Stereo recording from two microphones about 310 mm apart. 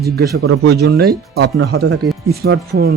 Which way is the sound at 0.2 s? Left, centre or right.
Right.